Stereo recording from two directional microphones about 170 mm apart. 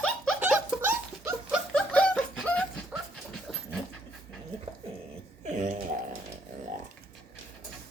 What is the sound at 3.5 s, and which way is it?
Dog, centre (ahead or behind).